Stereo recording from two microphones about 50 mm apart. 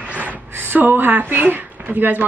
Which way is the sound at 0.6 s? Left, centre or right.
Right.